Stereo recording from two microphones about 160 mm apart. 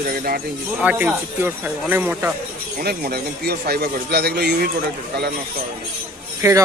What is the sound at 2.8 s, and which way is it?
A man's voice, 75° right (ahead or behind).